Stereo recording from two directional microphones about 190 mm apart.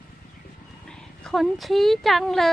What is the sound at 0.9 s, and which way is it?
Speech, centre (ahead or behind).